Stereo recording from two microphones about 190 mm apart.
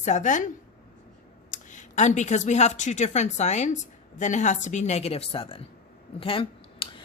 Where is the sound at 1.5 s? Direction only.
40° left (ahead or behind).